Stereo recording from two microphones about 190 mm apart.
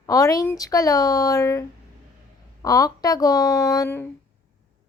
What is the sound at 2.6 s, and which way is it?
Speech, 20° left (ahead or behind).